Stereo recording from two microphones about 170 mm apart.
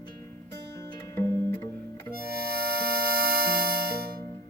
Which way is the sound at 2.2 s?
65° right (ahead or behind).